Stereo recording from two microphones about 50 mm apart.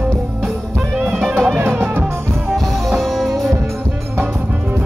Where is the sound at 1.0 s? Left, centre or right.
Centre.